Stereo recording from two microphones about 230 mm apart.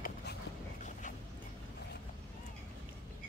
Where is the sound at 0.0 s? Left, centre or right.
Left.